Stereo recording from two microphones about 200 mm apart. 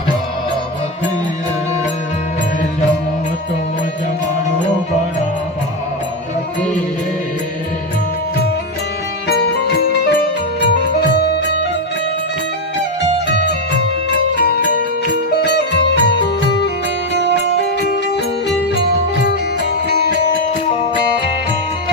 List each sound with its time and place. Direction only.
9.2 s music: 50° left (ahead or behind)
13.3 s music: 60° left (ahead or behind)
15.4 s music: 60° left (ahead or behind)